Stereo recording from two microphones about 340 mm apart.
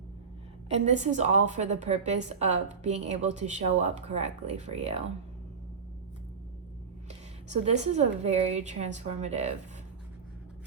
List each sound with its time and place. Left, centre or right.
0.7 s a woman's voice: centre
7.6 s a woman's voice: centre